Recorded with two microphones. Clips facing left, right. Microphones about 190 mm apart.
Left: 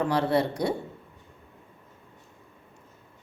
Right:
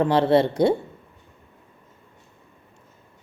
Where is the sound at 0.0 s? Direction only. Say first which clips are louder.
Right 6 dB; 25° right (ahead or behind).